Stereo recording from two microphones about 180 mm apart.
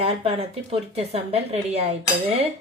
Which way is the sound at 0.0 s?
30° right (ahead or behind).